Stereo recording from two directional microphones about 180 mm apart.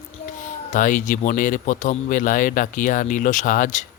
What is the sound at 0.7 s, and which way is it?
Speech, 45° left (ahead or behind).